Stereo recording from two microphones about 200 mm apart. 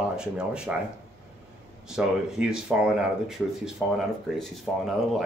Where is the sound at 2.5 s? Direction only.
5° right (ahead or behind).